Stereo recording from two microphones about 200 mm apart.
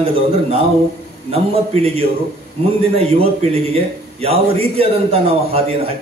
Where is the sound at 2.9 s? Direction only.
30° right (ahead or behind).